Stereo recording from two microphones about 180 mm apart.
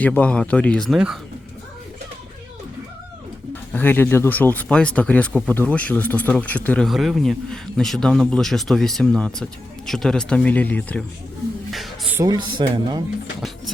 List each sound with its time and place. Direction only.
0.0 s speech: 10° left (ahead or behind)
3.5 s speech: 10° left (ahead or behind)
11.7 s music: centre (ahead or behind)
12.1 s speech: 20° right (ahead or behind)